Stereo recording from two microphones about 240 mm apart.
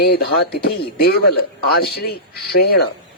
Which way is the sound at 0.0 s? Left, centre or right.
Left.